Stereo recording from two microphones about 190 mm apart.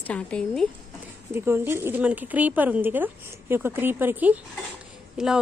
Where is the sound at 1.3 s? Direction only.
10° right (ahead or behind).